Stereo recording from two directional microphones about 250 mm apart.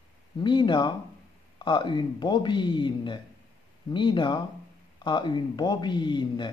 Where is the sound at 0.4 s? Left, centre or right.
Centre.